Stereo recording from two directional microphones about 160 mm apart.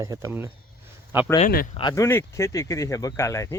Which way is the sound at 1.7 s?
25° left (ahead or behind).